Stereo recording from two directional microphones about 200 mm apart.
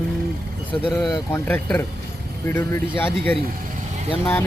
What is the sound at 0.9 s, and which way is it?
A man's voice, 10° left (ahead or behind).